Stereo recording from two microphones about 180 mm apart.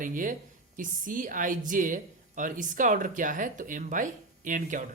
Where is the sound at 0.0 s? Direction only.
50° right (ahead or behind).